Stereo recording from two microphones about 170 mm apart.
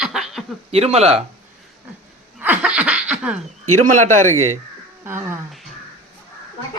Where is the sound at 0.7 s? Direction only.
35° right (ahead or behind).